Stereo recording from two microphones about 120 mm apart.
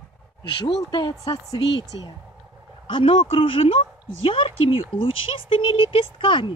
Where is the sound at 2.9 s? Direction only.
45° left (ahead or behind).